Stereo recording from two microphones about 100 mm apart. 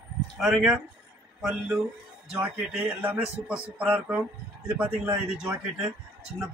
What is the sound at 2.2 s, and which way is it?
A man's voice, 10° right (ahead or behind).